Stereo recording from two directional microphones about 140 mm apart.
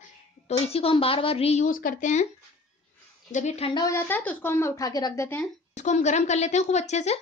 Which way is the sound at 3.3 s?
50° left (ahead or behind).